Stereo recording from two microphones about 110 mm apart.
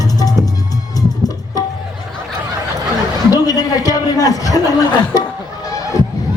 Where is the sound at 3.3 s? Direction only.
35° left (ahead or behind).